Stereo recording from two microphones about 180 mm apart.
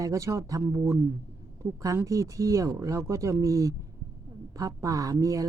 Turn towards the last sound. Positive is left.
turn(degrees=-20)  # may be behind; listen again after turning